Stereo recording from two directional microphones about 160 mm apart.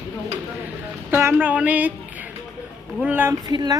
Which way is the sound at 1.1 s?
15° right (ahead or behind).